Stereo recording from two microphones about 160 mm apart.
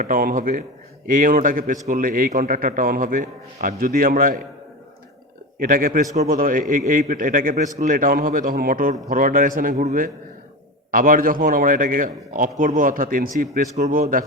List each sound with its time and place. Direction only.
0.0 s a man's voice: 60° right (ahead or behind)
5.5 s a man's voice: 60° right (ahead or behind)